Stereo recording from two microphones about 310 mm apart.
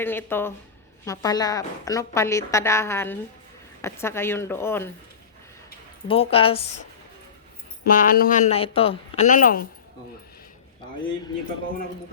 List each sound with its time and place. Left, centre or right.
0.0 s a woman's voice: centre
6.1 s a woman's voice: centre
7.9 s speech: left